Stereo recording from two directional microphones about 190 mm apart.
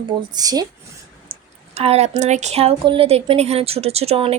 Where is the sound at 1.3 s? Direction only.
30° right (ahead or behind).